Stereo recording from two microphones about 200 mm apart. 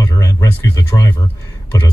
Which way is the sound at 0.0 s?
15° left (ahead or behind).